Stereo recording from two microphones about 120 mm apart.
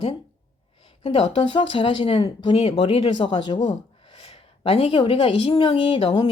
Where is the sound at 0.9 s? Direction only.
50° left (ahead or behind).